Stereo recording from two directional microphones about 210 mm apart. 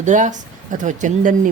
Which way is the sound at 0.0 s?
35° right (ahead or behind).